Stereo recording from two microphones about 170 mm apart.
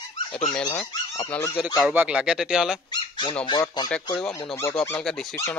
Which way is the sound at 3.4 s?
25° left (ahead or behind).